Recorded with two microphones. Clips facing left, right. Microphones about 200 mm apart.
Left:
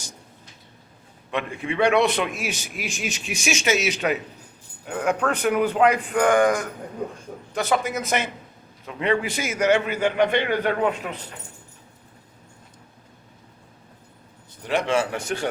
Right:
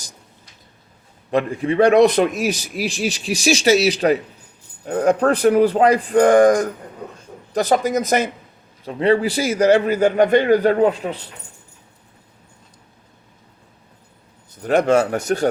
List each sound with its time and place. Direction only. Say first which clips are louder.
1.3 s a man's voice: right 8 dB; 35° right (ahead or behind)
14.6 s a man's voice: right 7 dB; 45° right (ahead or behind)